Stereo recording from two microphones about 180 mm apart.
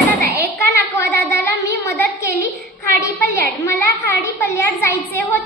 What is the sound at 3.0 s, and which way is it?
A child's voice, 20° left (ahead or behind).